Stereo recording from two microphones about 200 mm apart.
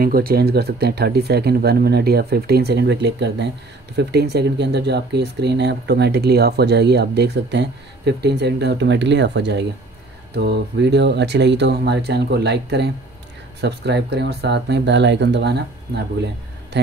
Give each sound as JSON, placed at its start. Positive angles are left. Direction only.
{"t": 0.0, "sound": "speech", "side_deg": -50}